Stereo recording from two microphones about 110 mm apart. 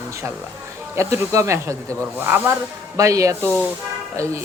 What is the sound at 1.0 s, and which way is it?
Speech, 25° right (ahead or behind).